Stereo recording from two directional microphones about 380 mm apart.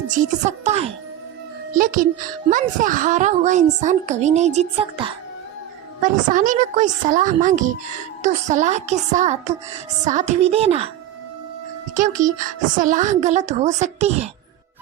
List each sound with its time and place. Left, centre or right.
0.1 s a woman's voice: centre
11.9 s a woman's voice: centre